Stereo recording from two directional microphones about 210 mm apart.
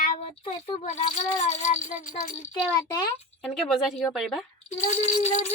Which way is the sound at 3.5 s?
Centre (ahead or behind).